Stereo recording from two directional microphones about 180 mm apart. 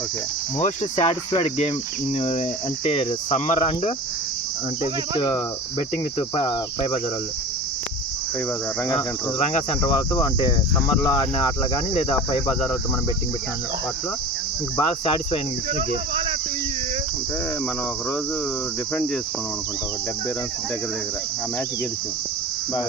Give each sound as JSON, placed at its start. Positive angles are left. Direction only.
{"t": 0.6, "sound": "cricket", "side_deg": 35}
{"t": 5.1, "sound": "cricket", "side_deg": 25}
{"t": 9.0, "sound": "cricket", "side_deg": 35}
{"t": 11.0, "sound": "cricket", "side_deg": 25}
{"t": 14.8, "sound": "cricket", "side_deg": 30}